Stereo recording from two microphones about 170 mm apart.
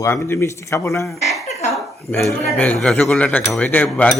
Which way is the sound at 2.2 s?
5° left (ahead or behind).